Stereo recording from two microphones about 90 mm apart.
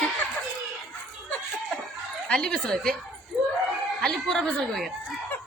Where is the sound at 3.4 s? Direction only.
5° right (ahead or behind).